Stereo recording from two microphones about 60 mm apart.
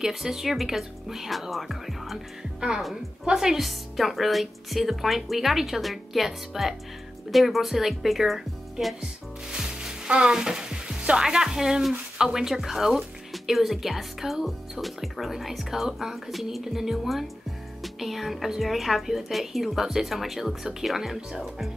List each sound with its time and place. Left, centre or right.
0.0 s speech: centre
3.3 s speech: centre
9.5 s frying: centre
11.9 s speech: centre